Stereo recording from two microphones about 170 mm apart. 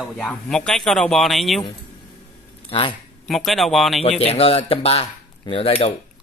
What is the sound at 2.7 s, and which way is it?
Speech, 30° left (ahead or behind).